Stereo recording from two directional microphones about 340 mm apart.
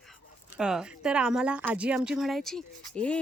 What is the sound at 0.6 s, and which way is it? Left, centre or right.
Speech, centre.